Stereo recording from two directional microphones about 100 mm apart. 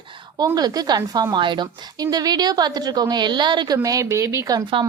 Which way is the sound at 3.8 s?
35° right (ahead or behind).